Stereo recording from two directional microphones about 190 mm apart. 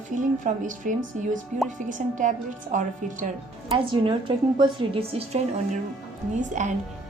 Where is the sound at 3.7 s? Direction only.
25° right (ahead or behind).